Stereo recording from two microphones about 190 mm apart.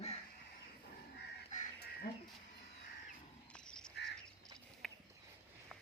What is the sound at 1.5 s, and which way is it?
Goose, 55° left (ahead or behind).